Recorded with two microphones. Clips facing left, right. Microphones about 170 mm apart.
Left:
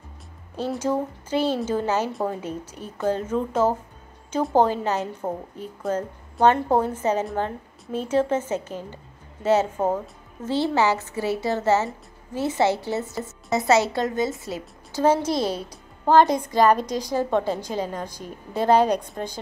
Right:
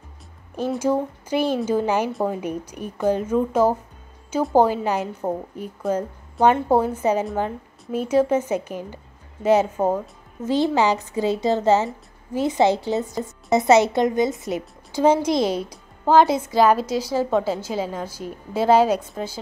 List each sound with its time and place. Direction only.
0.7 s a woman's voice: 10° right (ahead or behind)